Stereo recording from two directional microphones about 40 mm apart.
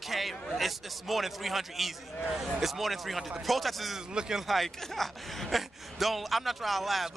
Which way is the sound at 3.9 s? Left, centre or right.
Centre.